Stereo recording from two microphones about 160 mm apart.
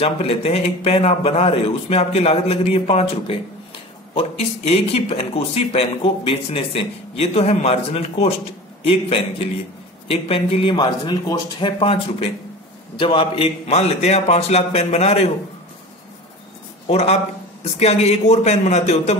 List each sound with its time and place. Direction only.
0.0 s speech: 40° left (ahead or behind)
10.2 s speech: 35° left (ahead or behind)
16.8 s a man's voice: 40° left (ahead or behind)